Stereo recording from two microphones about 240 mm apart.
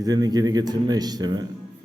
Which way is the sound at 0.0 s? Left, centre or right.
Centre.